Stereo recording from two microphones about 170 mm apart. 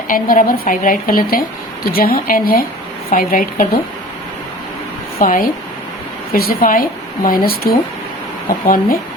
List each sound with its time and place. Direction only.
0.1 s a woman's voice: 55° left (ahead or behind)
5.2 s a woman's voice: 55° left (ahead or behind)